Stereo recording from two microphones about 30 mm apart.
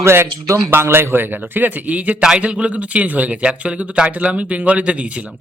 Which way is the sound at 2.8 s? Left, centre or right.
Right.